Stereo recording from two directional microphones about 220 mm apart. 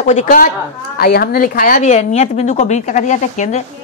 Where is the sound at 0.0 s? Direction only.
35° left (ahead or behind).